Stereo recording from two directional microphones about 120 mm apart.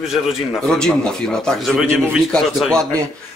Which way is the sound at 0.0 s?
5° right (ahead or behind).